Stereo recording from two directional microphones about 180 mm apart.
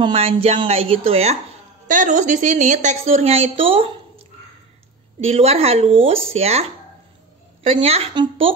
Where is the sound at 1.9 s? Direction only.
45° right (ahead or behind).